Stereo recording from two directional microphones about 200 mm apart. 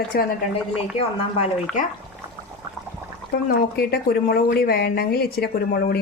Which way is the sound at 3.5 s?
50° left (ahead or behind).